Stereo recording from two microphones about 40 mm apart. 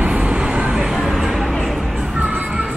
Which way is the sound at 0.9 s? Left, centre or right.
Centre.